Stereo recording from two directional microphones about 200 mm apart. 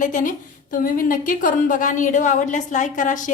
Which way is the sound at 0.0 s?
40° left (ahead or behind).